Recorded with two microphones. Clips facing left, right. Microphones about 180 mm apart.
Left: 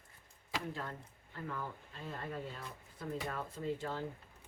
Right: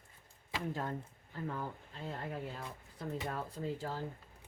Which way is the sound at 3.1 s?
35° right (ahead or behind).